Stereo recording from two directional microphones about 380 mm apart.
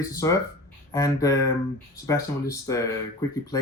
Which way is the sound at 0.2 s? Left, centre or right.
Centre.